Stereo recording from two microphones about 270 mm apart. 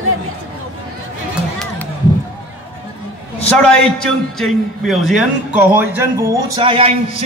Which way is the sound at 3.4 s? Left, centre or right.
Centre.